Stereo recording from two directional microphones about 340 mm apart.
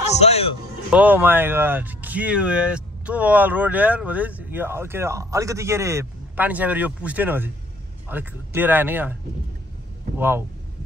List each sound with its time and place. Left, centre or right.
0.0 s a man's voice: centre
0.8 s speech: centre
10.1 s speech: centre